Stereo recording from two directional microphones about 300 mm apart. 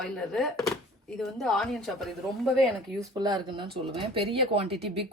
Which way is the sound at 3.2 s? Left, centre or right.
Centre.